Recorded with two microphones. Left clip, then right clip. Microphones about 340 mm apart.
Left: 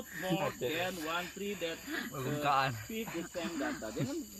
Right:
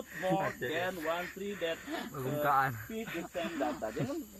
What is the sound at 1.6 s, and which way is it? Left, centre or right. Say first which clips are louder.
Speech: right 4 dB; centre.